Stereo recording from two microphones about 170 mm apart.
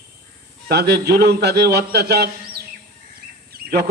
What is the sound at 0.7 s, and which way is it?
A man's voice, 70° right (ahead or behind).